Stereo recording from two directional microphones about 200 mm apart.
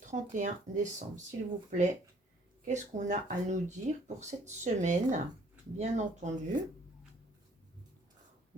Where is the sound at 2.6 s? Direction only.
35° right (ahead or behind).